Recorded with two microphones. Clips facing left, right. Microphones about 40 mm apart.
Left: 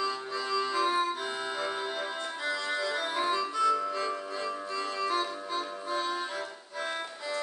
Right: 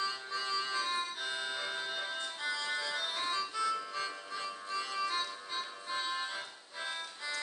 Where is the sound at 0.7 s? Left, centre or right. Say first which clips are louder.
Left 8 dB; left.